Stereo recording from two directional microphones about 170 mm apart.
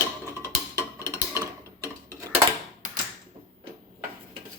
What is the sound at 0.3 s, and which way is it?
Tick-tock, 20° right (ahead or behind).